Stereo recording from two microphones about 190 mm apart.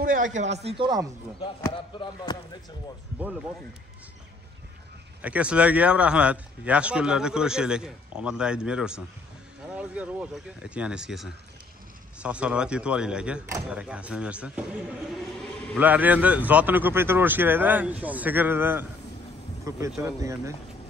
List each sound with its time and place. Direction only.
0.0 s speech: 45° right (ahead or behind); by 1.0 s 25° right (ahead or behind)
1.7 s speech: 25° left (ahead or behind)
3.2 s a man's voice: 5° right (ahead or behind)
5.2 s a man's voice: 5° right (ahead or behind)